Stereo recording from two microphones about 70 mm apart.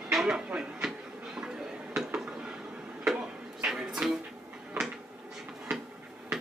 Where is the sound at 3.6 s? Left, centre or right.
Centre.